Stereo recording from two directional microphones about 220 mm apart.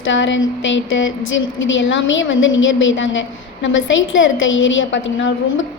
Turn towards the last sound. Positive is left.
turn(degrees=60)  # may be behind; listen again after turning